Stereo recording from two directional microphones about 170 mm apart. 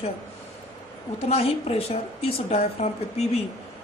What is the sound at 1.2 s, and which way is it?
A woman's voice, 35° left (ahead or behind).